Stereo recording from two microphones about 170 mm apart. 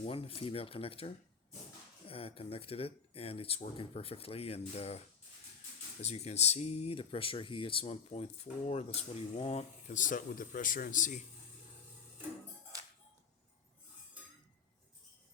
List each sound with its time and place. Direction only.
0.0 s speech: 35° left (ahead or behind)